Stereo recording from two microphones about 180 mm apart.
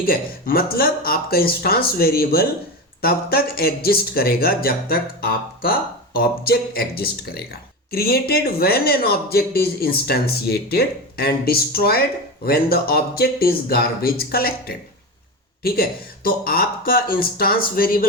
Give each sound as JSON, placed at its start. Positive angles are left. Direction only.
{"t": 0.0, "sound": "speech", "side_deg": 55}